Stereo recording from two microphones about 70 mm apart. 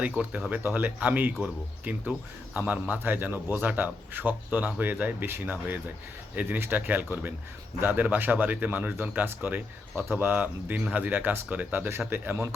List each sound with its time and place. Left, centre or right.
0.5 s speech: right
11.9 s a man's voice: right